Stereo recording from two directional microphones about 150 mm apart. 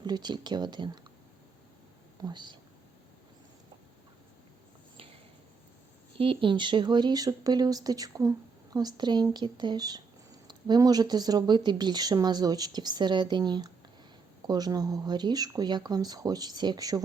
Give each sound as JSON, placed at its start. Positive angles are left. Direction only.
{"t": 0.0, "sound": "speech", "side_deg": -30}
{"t": 2.2, "sound": "speech", "side_deg": -30}
{"t": 6.1, "sound": "speech", "side_deg": -35}